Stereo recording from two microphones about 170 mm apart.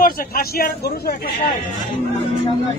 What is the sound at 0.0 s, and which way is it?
Speech, 60° left (ahead or behind).